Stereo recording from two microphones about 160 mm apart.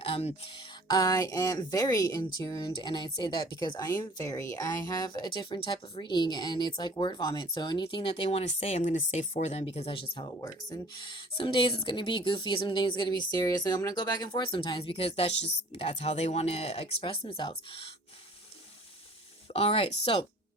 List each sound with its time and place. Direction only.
0.0 s speech: 40° left (ahead or behind)
0.9 s speech: 25° left (ahead or behind)
3.8 s speech: 15° left (ahead or behind); by 17.8 s 35° left (ahead or behind)
19.5 s speech: 40° left (ahead or behind)